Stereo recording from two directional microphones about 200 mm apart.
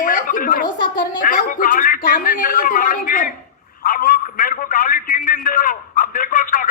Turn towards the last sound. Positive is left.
turn(degrees=45)  # may be behind; listen again after turning